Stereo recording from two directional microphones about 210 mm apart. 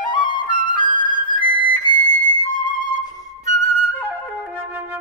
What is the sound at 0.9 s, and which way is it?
Music, 20° left (ahead or behind).